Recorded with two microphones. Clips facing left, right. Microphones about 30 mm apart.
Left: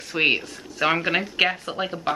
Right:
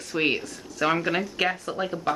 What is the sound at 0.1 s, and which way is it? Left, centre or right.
Speech, left.